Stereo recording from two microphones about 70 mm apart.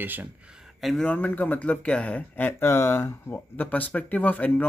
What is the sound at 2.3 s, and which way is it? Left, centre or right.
Speech, left.